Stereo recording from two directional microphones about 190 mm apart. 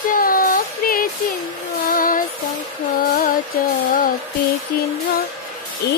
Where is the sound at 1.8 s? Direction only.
45° left (ahead or behind).